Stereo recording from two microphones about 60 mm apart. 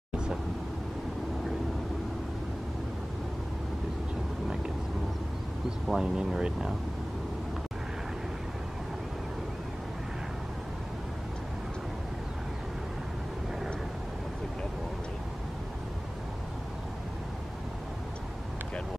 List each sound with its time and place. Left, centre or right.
5.9 s speech: centre